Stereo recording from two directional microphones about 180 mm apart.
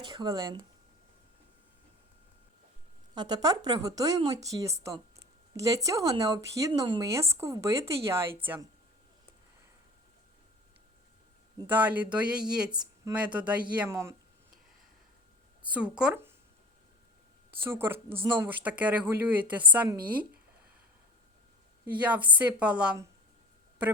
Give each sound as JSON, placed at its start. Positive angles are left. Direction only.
{"t": 0.0, "sound": "a woman's voice", "side_deg": -25}
{"t": 3.2, "sound": "a woman's voice", "side_deg": -25}
{"t": 11.6, "sound": "speech", "side_deg": -10}
{"t": 12.7, "sound": "speech", "side_deg": -25}
{"t": 13.1, "sound": "speech", "side_deg": -5}
{"t": 15.6, "sound": "speech", "side_deg": -5}
{"t": 17.6, "sound": "speech", "side_deg": -15}
{"t": 21.9, "sound": "speech", "side_deg": -10}